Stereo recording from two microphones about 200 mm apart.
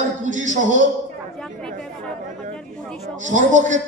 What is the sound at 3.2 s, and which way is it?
Speech, 40° right (ahead or behind).